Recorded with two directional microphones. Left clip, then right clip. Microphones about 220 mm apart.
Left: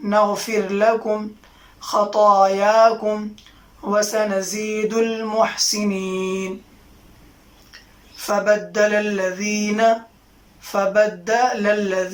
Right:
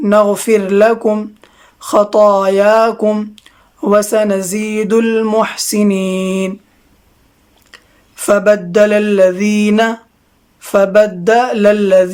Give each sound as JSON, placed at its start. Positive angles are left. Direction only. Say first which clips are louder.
{"t": 0.0, "sound": "speech", "louder": "right 7 dB", "side_deg": -50}
{"t": 8.1, "sound": "speech", "louder": "right 8 dB", "side_deg": -50}